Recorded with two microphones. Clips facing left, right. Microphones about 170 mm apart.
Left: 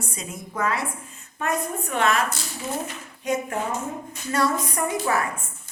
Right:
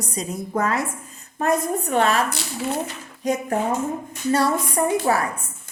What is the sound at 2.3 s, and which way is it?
Speech, 70° right (ahead or behind).